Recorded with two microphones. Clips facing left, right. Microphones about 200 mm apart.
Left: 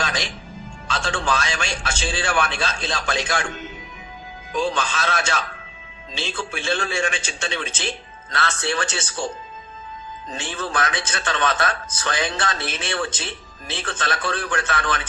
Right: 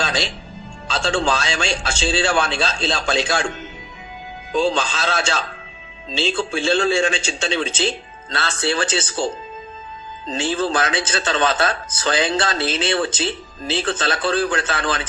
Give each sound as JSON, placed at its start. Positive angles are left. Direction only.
{"t": 0.0, "sound": "music", "side_deg": -30}
{"t": 0.9, "sound": "a man's voice", "side_deg": -30}
{"t": 4.5, "sound": "a man's voice", "side_deg": -30}
{"t": 10.4, "sound": "a man's voice", "side_deg": -30}